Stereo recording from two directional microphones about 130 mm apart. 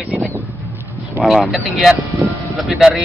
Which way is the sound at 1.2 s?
Centre (ahead or behind).